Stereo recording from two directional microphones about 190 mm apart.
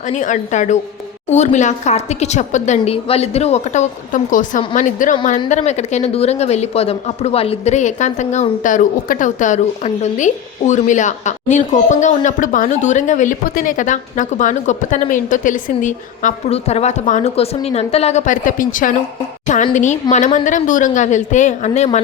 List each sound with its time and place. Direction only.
0.1 s speech: 40° left (ahead or behind)